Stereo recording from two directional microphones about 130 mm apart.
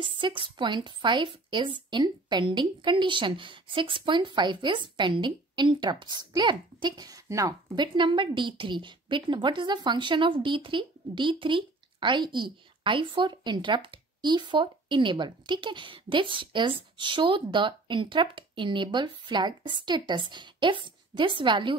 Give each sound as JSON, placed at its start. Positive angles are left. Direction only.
{"t": 0.0, "sound": "a woman's voice", "side_deg": -40}